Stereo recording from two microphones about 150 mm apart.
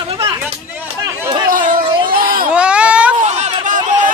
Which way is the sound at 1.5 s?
65° right (ahead or behind).